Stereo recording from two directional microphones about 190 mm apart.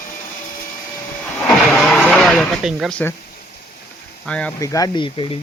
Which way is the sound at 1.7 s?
5° left (ahead or behind).